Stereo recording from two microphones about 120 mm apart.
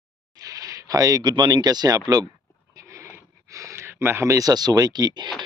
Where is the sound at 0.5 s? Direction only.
30° right (ahead or behind).